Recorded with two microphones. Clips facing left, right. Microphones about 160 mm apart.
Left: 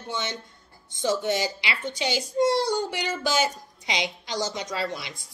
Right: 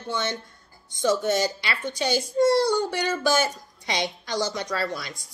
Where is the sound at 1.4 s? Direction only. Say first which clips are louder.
Right 3 dB; 15° left (ahead or behind).